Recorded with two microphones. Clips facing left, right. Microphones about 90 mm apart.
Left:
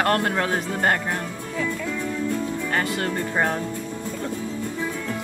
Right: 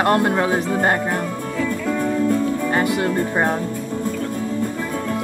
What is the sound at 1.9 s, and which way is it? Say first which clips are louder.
Music: right 7 dB; 50° right (ahead or behind).